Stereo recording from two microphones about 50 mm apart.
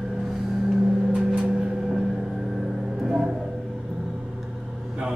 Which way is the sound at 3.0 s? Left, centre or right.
Centre.